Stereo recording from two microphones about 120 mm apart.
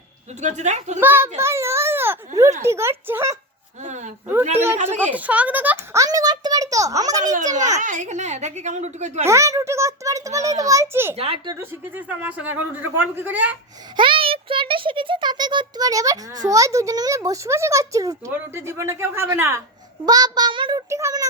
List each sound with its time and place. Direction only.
0.4 s a child's voice: 80° right
0.9 s a child's voice: 20° right (ahead or behind)
1.4 s baby cry: 20° right (ahead or behind)
2.6 s a child's voice: 20° right (ahead or behind)
3.8 s a woman's voice: 90° right
5.1 s a child's voice: 10° right (ahead or behind); by 7.2 s 30° right (ahead or behind)
7.2 s a child's voice: 90° right
9.2 s a child's voice: 25° right (ahead or behind)
13.9 s a child's voice: 45° right (ahead or behind); by 19.6 s 20° right (ahead or behind)
20.1 s a child's voice: 35° right (ahead or behind)
20.9 s a child's voice: 25° right (ahead or behind)